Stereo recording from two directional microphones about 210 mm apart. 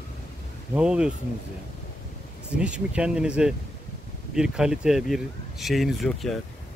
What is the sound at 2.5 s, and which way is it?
Speech, 5° right (ahead or behind).